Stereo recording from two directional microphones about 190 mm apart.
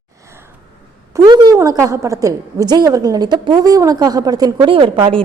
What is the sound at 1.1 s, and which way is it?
A woman's voice, 20° right (ahead or behind).